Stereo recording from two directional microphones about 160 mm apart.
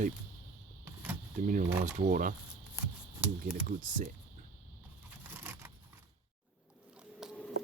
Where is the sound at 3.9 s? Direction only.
55° right (ahead or behind).